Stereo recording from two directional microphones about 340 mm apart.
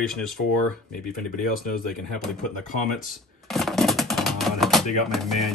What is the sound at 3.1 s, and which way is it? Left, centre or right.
Typewriter, centre.